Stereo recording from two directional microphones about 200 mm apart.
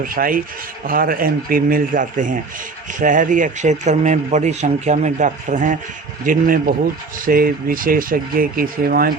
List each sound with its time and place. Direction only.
0.0 s speech: 45° right (ahead or behind)